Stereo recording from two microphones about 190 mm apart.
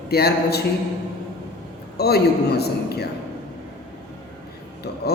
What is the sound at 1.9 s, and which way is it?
A man's voice, 55° left (ahead or behind).